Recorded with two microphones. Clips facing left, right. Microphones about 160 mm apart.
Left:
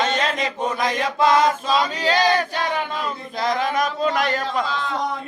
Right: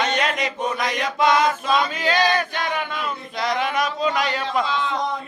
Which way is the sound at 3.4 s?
35° left (ahead or behind).